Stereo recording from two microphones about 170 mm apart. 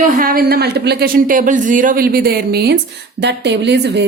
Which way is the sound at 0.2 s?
60° right (ahead or behind).